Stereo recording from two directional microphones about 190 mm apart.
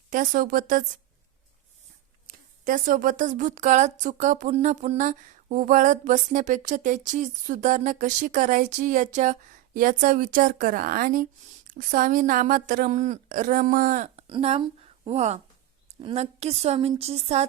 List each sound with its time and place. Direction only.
0.1 s speech: 45° right (ahead or behind)
2.2 s speech: 45° right (ahead or behind)
14.3 s a woman's voice: 30° right (ahead or behind)